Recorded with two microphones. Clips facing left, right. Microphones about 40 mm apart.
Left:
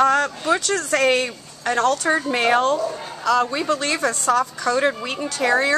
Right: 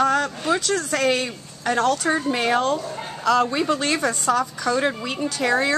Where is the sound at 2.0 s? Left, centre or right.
Centre.